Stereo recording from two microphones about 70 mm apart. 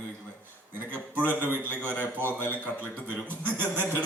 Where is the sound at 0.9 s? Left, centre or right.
Right.